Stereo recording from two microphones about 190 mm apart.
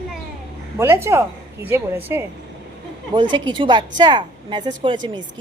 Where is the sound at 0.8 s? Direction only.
15° right (ahead or behind).